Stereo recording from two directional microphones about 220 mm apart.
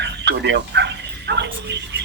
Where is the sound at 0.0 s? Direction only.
50° right (ahead or behind).